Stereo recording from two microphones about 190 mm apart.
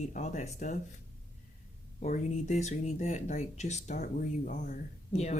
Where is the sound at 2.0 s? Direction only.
35° left (ahead or behind).